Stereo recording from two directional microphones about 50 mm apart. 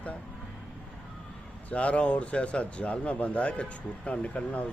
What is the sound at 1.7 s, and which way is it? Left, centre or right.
Speech, left.